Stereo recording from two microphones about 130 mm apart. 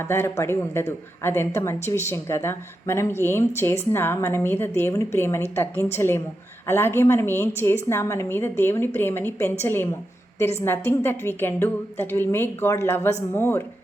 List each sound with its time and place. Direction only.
0.0 s a woman's voice: 20° left (ahead or behind)